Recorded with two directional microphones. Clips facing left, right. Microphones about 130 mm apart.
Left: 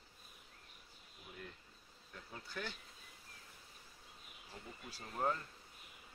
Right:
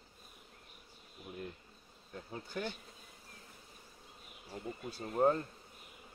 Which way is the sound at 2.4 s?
40° right (ahead or behind).